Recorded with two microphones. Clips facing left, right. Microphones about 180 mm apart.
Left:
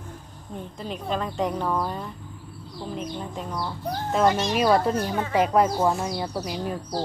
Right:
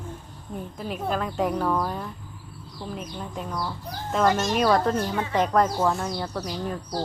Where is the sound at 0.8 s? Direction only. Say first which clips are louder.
Right 1 dB; 5° right (ahead or behind).